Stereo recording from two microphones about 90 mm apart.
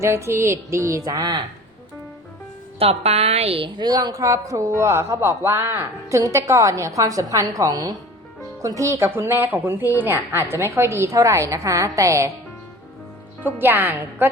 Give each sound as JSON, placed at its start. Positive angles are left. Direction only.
{"t": 0.0, "sound": "a man's voice", "side_deg": -30}
{"t": 2.8, "sound": "a woman's voice", "side_deg": -90}
{"t": 3.8, "sound": "a man's voice", "side_deg": -50}
{"t": 13.4, "sound": "a woman's voice", "side_deg": -20}